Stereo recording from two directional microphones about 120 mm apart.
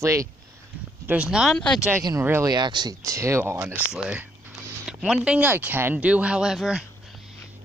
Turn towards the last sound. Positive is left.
turn(degrees=-5)  # may be behind; listen again after turning